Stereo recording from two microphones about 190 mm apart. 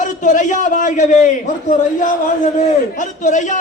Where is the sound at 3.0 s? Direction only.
40° left (ahead or behind).